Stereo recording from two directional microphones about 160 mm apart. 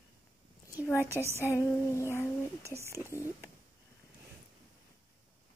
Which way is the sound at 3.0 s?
20° left (ahead or behind).